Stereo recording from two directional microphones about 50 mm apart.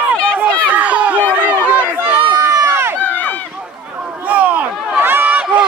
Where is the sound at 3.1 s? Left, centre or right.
Left.